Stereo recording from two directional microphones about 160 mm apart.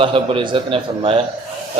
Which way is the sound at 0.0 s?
35° right (ahead or behind).